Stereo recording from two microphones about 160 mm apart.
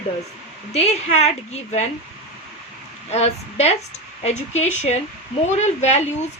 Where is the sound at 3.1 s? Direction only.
40° left (ahead or behind).